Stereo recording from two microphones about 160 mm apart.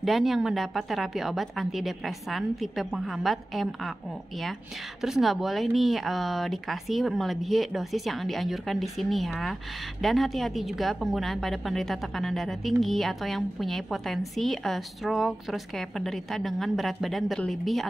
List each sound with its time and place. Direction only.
0.0 s a woman's voice: centre (ahead or behind)
5.0 s a woman's voice: centre (ahead or behind)